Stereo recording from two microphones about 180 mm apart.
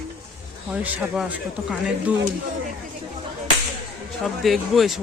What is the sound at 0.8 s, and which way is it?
A man's voice, 10° right (ahead or behind).